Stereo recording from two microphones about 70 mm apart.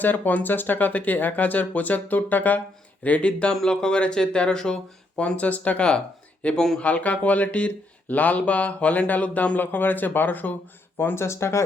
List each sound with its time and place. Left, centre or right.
0.0 s speech: left